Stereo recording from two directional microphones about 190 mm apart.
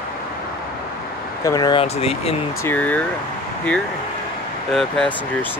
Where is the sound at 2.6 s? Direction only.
10° left (ahead or behind).